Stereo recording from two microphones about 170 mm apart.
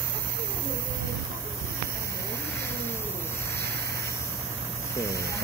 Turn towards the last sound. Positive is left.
turn(degrees=15)  # may be behind; listen again after turning